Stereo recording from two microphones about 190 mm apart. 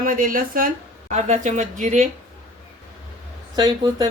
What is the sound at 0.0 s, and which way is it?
Speech, 50° right (ahead or behind).